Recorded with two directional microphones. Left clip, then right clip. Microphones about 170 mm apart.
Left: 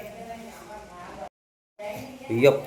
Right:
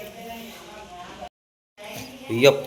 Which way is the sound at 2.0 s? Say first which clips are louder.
Right 2 dB; 5° left (ahead or behind).